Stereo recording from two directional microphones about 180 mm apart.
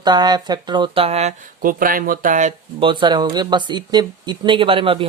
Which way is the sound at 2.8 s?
25° right (ahead or behind).